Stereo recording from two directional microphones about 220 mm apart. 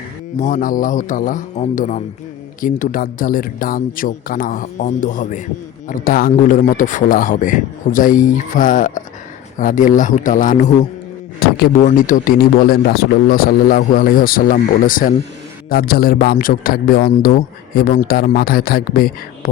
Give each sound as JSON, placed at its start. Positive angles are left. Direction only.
{"t": 0.3, "sound": "speech", "side_deg": 35}